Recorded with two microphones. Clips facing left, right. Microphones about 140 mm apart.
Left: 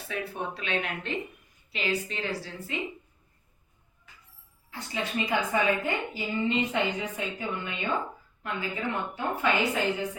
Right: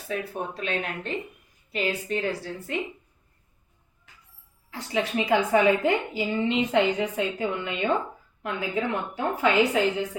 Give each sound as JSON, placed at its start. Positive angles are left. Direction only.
{"t": 0.1, "sound": "a woman's voice", "side_deg": -40}
{"t": 4.7, "sound": "a woman's voice", "side_deg": -85}